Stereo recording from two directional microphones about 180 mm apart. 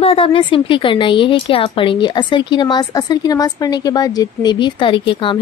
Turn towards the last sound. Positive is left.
turn(degrees=30)  # may be behind; listen again after turning